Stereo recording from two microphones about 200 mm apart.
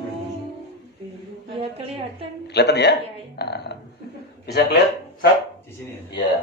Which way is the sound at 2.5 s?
55° left (ahead or behind).